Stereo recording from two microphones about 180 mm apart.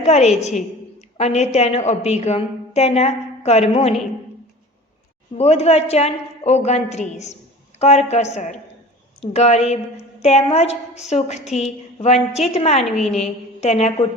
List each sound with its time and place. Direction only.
0.0 s a woman's voice: 40° left (ahead or behind)
5.4 s a woman's voice: 35° left (ahead or behind)
12.7 s a woman's voice: centre (ahead or behind)
13.2 s a woman's voice: 35° left (ahead or behind)